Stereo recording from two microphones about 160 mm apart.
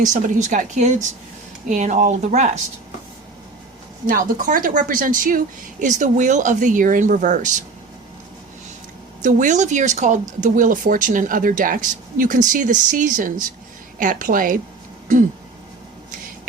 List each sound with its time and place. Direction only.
0.0 s speech: 50° right (ahead or behind)
4.0 s speech: 55° right (ahead or behind)
9.2 s speech: 50° right (ahead or behind)